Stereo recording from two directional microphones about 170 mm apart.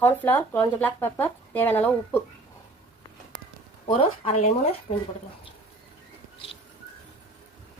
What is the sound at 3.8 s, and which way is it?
Speech, 40° left (ahead or behind).